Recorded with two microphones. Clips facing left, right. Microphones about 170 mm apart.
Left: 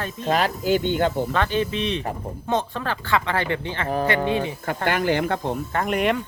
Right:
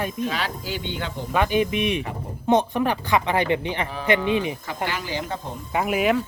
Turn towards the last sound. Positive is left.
turn(degrees=-5)  # may be behind; listen again after turning